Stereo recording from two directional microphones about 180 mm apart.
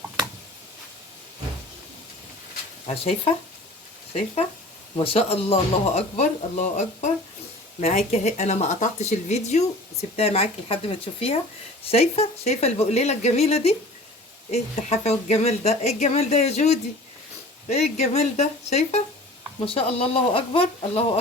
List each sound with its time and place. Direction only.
2.8 s speech: 30° left (ahead or behind)
4.9 s speech: 30° left (ahead or behind)